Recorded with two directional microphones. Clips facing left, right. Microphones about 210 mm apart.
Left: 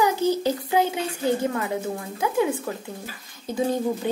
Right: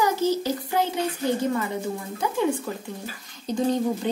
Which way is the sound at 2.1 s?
5° left (ahead or behind).